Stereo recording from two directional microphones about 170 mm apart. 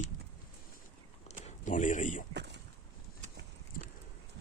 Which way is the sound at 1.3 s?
45° left (ahead or behind).